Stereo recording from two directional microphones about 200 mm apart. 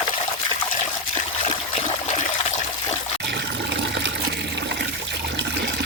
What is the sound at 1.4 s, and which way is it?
Trickle, 35° left (ahead or behind).